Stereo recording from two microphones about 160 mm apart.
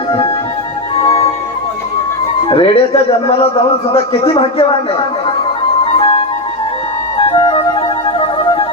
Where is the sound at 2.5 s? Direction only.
35° left (ahead or behind).